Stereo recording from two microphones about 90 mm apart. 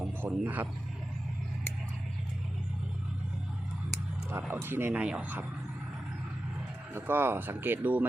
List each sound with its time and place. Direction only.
0.0 s wild animals: 15° right (ahead or behind)
0.4 s speech: 20° right (ahead or behind)
4.3 s speech: 25° right (ahead or behind)
4.9 s speech: 10° right (ahead or behind)
6.9 s speech: 25° right (ahead or behind)